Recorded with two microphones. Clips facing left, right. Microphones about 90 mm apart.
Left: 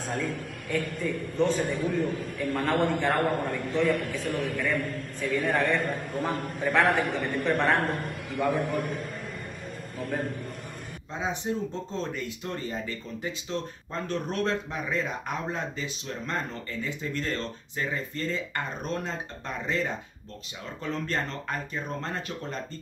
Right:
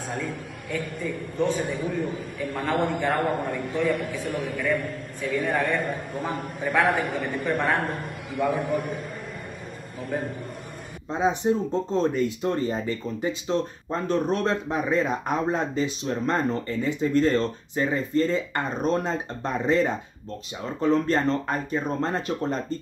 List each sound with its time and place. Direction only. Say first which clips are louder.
1.0 s a man's voice: right 1 dB; 5° right (ahead or behind)
10.0 s a man's voice: right 2 dB; centre (ahead or behind)
11.4 s speech: right 7 dB; 30° right (ahead or behind)
14.7 s speech: right 7 dB; 30° right (ahead or behind)